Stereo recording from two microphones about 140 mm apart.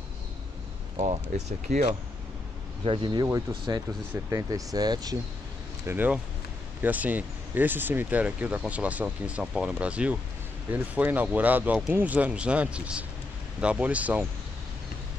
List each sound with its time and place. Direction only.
0.9 s speech: 55° right (ahead or behind)
2.8 s speech: 40° right (ahead or behind)
5.9 s speech: 15° right (ahead or behind)